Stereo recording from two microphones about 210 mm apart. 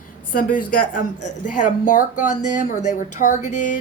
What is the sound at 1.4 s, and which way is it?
A woman's voice, 40° left (ahead or behind).